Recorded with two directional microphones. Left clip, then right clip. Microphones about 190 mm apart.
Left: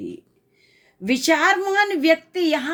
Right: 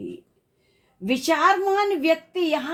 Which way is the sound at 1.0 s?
40° left (ahead or behind).